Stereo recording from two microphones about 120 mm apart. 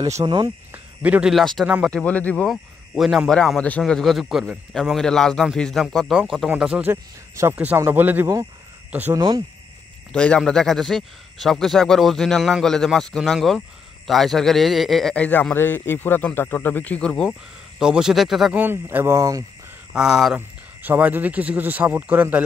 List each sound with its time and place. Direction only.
0.2 s speech: 40° right (ahead or behind)
0.7 s cricket: 10° right (ahead or behind)
1.4 s speech: 5° left (ahead or behind)
2.4 s speech: centre (ahead or behind)
3.5 s speech: 10° left (ahead or behind); by 6.9 s 5° right (ahead or behind)
6.9 s speech: 20° right (ahead or behind)
9.1 s speech: 35° right (ahead or behind)
10.1 s speech: 5° left (ahead or behind)
17.7 s speech: 5° right (ahead or behind)
18.5 s speech: 15° right (ahead or behind)
19.9 s speech: 5° right (ahead or behind)
20.3 s speech: 15° right (ahead or behind)